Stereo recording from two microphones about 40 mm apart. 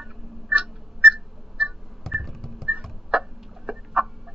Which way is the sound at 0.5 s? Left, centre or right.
Right.